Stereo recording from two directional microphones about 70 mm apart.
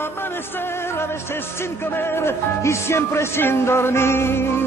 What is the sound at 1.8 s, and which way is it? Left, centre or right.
Music, left.